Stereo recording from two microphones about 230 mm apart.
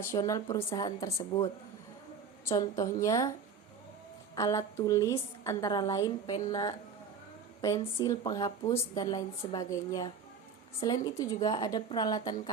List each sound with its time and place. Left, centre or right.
0.0 s a woman's voice: centre
2.5 s a woman's voice: centre
4.4 s a woman's voice: centre